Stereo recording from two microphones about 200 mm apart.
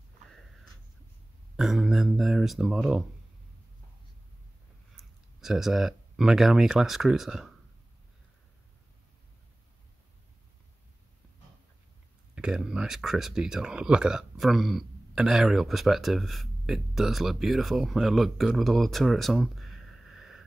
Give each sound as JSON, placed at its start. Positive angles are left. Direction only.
{"t": 1.6, "sound": "speech", "side_deg": 0}
{"t": 4.9, "sound": "speech", "side_deg": 0}
{"t": 12.4, "sound": "speech", "side_deg": -5}